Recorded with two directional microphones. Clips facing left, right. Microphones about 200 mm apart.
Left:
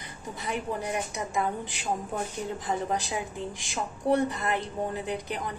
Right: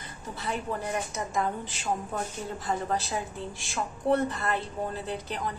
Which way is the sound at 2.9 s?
15° left (ahead or behind).